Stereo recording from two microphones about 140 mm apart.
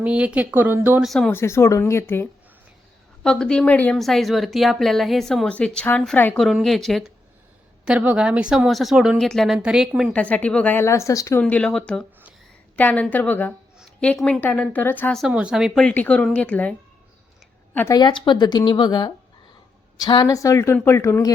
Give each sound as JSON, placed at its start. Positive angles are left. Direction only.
{"t": 0.0, "sound": "speech", "side_deg": -10}
{"t": 1.0, "sound": "speech", "side_deg": 0}
{"t": 1.3, "sound": "speech", "side_deg": 20}
{"t": 3.2, "sound": "speech", "side_deg": 5}
{"t": 6.4, "sound": "speech", "side_deg": 0}
{"t": 10.1, "sound": "speech", "side_deg": 10}
{"t": 11.3, "sound": "speech", "side_deg": 10}
{"t": 15.3, "sound": "speech", "side_deg": -5}
{"t": 17.9, "sound": "speech", "side_deg": 35}